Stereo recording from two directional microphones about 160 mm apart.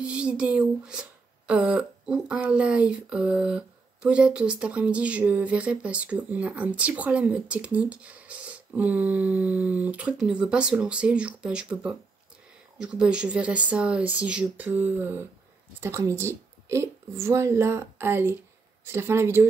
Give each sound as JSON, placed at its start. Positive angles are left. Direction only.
{"t": 0.0, "sound": "speech", "side_deg": -5}